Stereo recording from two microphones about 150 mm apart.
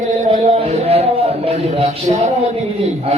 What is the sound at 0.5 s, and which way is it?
A man's voice, 45° right (ahead or behind).